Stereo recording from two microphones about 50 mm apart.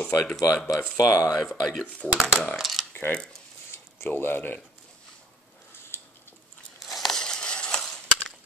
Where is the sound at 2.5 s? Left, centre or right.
Centre.